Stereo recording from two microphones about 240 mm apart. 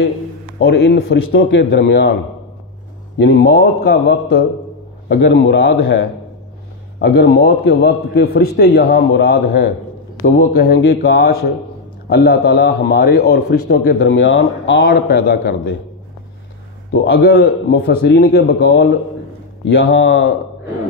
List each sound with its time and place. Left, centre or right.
0.6 s a man's voice: left
3.2 s a man's voice: left
7.0 s a man's voice: left
16.9 s a man's voice: left